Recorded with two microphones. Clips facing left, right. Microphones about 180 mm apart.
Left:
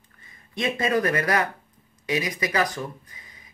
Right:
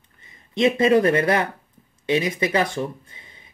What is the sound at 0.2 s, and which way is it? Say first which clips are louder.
Speech: right 9 dB; 25° right (ahead or behind).